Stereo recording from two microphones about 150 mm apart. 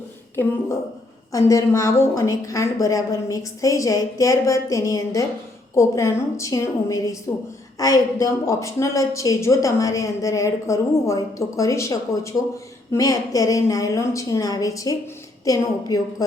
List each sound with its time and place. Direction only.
1.3 s a woman's voice: 20° left (ahead or behind)